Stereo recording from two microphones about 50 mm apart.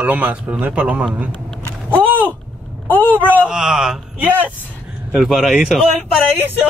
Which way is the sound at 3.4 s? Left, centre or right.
Centre.